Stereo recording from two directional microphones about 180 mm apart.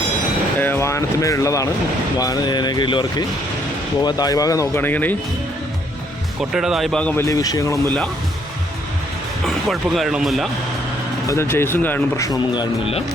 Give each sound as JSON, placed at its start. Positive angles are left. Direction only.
{"t": 0.6, "sound": "speech", "side_deg": 15}
{"t": 6.5, "sound": "speech", "side_deg": -5}
{"t": 9.5, "sound": "speech", "side_deg": 0}
{"t": 11.3, "sound": "speech", "side_deg": 15}